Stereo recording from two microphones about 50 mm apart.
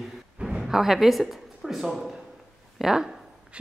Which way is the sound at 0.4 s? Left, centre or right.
Centre.